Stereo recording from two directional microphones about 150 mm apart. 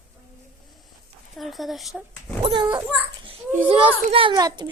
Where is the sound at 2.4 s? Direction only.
30° right (ahead or behind).